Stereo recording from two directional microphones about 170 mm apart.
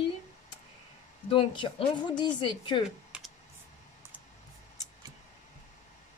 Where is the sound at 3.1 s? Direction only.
5° right (ahead or behind).